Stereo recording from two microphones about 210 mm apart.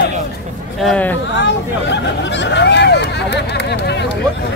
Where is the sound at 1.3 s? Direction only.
55° left (ahead or behind).